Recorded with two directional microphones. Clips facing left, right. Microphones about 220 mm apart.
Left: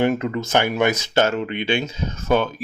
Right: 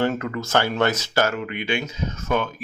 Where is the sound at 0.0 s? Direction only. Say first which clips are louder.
Left 3 dB; 20° left (ahead or behind).